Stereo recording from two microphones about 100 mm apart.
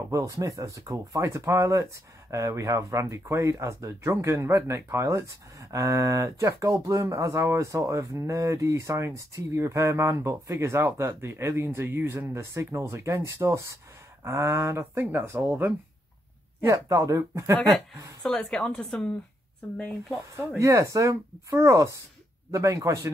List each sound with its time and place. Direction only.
0.1 s speech: 30° right (ahead or behind)
16.6 s speech: 35° right (ahead or behind)
18.2 s speech: 10° left (ahead or behind)
20.2 s speech: 30° right (ahead or behind)